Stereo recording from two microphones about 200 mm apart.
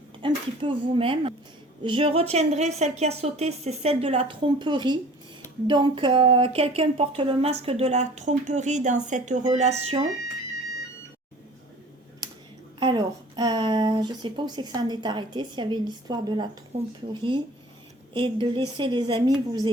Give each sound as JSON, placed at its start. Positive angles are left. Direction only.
{"t": 0.2, "sound": "a woman's voice", "side_deg": -25}
{"t": 12.8, "sound": "a woman's voice", "side_deg": -25}